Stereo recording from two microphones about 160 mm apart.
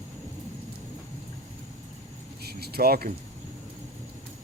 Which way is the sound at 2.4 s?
80° right.